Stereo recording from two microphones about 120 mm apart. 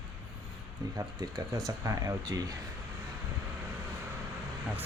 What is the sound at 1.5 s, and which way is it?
Speech, 30° right (ahead or behind).